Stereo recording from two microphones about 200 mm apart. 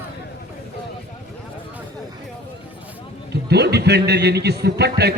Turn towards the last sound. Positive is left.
turn(degrees=-55)  # may be behind; listen again after turning